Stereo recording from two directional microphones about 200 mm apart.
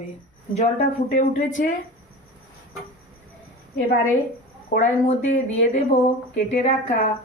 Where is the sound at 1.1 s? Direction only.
40° left (ahead or behind).